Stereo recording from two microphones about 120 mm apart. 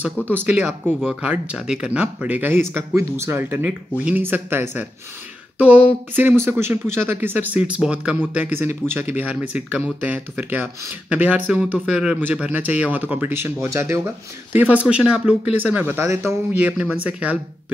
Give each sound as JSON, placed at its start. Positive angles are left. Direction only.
{"t": 0.3, "sound": "speech", "side_deg": -15}